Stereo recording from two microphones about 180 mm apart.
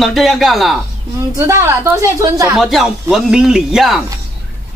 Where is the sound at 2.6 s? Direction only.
Centre (ahead or behind).